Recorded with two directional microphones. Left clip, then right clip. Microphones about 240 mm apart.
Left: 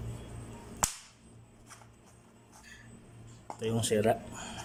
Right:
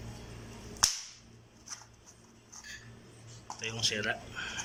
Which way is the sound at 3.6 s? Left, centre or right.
Left.